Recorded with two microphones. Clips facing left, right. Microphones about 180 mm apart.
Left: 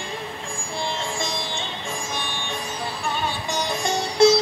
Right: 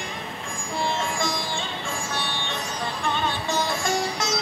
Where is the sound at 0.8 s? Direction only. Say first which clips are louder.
Right 2 dB; 25° left (ahead or behind).